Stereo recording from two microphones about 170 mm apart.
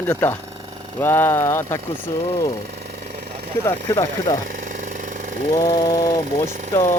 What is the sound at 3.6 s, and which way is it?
Speech, 15° left (ahead or behind).